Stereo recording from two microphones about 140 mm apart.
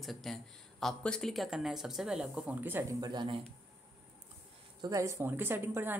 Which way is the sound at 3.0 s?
35° right (ahead or behind).